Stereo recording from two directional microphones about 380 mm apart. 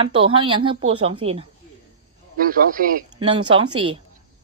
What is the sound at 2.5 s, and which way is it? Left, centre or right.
Speech, centre.